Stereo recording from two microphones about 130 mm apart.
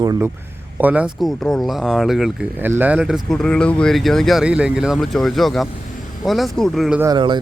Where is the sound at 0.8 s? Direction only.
10° right (ahead or behind).